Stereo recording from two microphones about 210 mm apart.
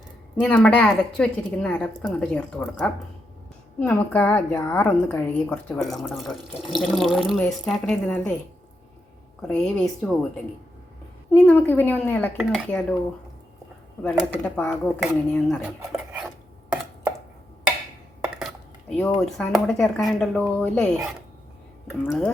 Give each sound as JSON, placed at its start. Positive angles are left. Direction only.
{"t": 0.4, "sound": "a woman's voice", "side_deg": 5}
{"t": 9.4, "sound": "a woman's voice", "side_deg": 5}
{"t": 11.4, "sound": "a woman's voice", "side_deg": 10}
{"t": 14.0, "sound": "a woman's voice", "side_deg": 5}
{"t": 18.3, "sound": "dishes", "side_deg": 0}
{"t": 19.1, "sound": "a woman's voice", "side_deg": 0}